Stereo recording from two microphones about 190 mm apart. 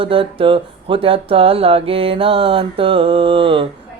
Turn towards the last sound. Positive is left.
turn(degrees=-25)  # may be behind; listen again after turning